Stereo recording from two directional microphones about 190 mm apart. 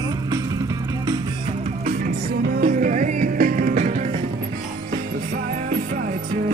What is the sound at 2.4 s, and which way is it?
Music, 50° right (ahead or behind).